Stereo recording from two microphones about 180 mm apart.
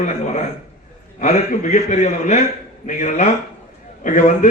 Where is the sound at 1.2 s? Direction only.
40° left (ahead or behind).